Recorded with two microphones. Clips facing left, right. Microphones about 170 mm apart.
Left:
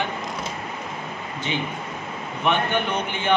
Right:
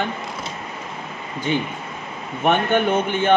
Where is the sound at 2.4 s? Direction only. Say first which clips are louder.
Right 5 dB; 50° right (ahead or behind).